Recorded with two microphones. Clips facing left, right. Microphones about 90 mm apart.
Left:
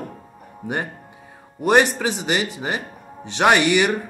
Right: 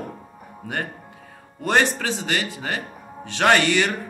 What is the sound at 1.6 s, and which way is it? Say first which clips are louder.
Speech: left 4 dB; 15° left (ahead or behind).